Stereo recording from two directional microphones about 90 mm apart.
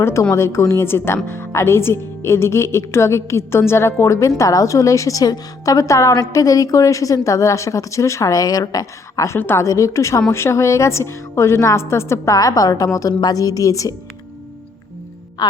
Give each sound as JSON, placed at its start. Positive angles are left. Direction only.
{"t": 0.0, "sound": "speech", "side_deg": 30}
{"t": 15.4, "sound": "a woman's voice", "side_deg": 50}